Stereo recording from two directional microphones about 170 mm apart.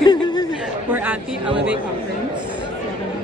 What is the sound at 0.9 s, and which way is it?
Speech, 10° right (ahead or behind).